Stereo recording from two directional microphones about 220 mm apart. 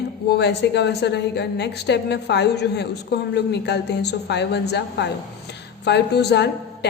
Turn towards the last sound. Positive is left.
turn(degrees=50)  # may be behind; listen again after turning